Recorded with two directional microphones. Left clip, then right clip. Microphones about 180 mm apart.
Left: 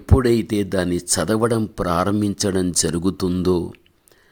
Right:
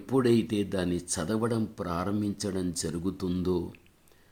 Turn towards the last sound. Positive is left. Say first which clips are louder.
# left 10 dB
turn(degrees=50)  # may be behind; listen again after turning